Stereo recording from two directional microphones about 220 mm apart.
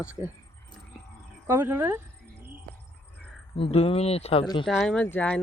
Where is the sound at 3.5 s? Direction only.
25° left (ahead or behind).